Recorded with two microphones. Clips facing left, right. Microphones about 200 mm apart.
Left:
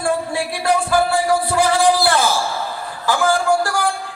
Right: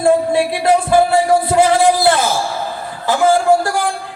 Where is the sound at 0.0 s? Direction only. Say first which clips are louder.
Right 8 dB; 20° right (ahead or behind).